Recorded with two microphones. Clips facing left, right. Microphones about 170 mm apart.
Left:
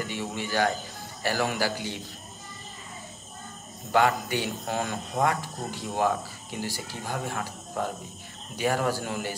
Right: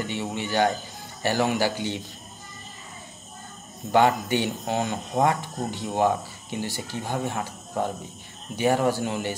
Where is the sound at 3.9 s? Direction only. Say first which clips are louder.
Right 3 dB; 25° right (ahead or behind).